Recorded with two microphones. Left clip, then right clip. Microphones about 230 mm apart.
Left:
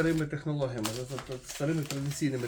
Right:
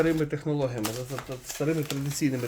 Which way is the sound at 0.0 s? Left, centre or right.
Right.